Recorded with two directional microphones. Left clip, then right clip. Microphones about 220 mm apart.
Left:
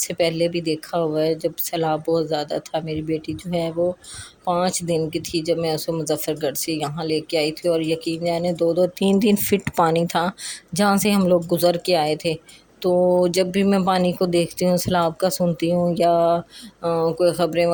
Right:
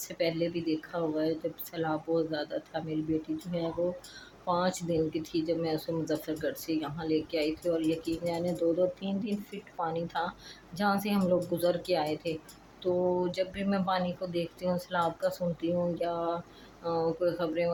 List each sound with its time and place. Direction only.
0.0 s speech: 40° left (ahead or behind)